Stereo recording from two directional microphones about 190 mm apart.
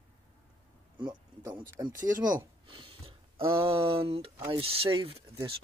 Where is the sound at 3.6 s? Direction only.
30° right (ahead or behind).